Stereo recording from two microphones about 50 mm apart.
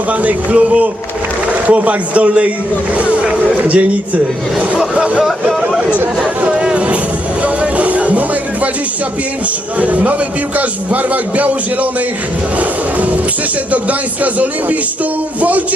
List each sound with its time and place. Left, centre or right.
0.1 s a man's voice: right
3.6 s a man's voice: right
5.2 s speech: centre
6.4 s music: right
9.8 s a man's voice: right
15.4 s a man's voice: right